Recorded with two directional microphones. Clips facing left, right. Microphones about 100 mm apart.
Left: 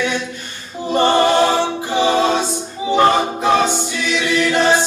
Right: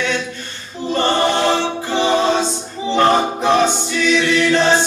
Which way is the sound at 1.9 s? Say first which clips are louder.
Even; 15° left (ahead or behind).